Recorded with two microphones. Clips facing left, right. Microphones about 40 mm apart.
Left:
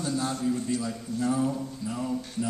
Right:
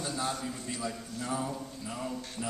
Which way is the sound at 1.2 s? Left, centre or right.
Centre.